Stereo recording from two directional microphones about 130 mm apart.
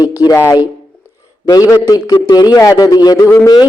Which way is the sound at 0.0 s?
30° left (ahead or behind).